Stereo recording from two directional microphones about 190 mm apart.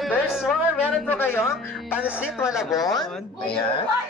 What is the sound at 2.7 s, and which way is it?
Speech, 20° left (ahead or behind).